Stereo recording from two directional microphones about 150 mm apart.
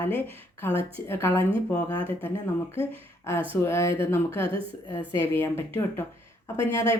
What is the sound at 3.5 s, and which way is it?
Speech, 15° left (ahead or behind).